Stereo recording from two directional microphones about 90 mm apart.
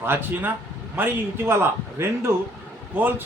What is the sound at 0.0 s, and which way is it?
A man's voice, 25° right (ahead or behind).